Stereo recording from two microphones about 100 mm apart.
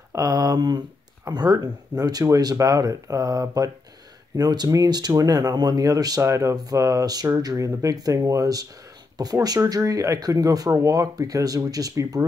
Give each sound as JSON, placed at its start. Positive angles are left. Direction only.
{"t": 0.1, "sound": "speech", "side_deg": -40}